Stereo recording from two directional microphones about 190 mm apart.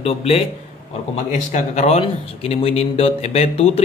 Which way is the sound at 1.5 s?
35° left (ahead or behind).